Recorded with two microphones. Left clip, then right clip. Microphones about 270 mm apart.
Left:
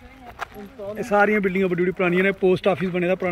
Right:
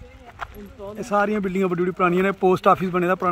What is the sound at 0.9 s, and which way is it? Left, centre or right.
Speech, centre.